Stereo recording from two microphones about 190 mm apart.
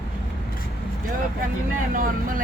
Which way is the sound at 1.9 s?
45° right (ahead or behind).